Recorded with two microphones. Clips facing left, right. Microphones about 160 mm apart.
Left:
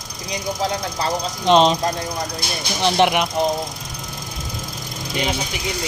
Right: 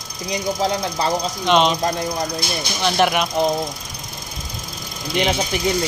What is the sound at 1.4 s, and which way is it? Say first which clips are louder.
Speech: left 3 dB; 35° left (ahead or behind).